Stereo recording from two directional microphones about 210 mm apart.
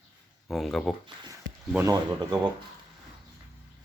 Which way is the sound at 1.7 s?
15° right (ahead or behind).